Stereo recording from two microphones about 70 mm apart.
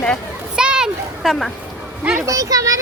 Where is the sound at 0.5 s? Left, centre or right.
Centre.